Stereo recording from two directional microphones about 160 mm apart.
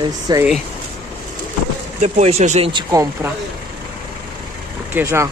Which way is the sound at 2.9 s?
20° right (ahead or behind).